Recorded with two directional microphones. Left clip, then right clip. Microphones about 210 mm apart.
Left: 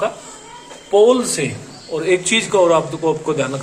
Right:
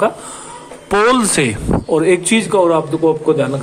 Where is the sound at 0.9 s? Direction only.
55° right (ahead or behind).